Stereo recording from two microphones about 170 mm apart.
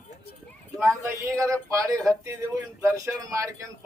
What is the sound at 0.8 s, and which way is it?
Speech, 15° right (ahead or behind).